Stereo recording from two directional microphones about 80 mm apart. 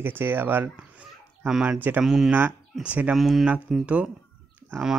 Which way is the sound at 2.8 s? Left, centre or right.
Centre.